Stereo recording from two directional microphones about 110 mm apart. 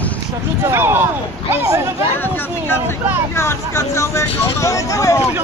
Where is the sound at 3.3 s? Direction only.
25° left (ahead or behind).